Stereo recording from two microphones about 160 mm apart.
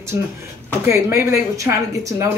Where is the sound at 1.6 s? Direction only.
20° right (ahead or behind).